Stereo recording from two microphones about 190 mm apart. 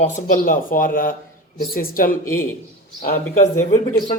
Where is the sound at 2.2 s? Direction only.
15° left (ahead or behind).